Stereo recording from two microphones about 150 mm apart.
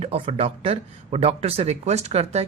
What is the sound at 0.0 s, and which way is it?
Speech, 40° right (ahead or behind).